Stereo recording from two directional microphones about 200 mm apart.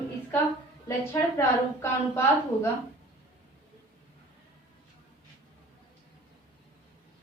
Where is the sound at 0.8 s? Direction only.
15° left (ahead or behind).